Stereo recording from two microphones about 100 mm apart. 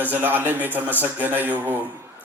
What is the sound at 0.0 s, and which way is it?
A man's voice, 15° right (ahead or behind).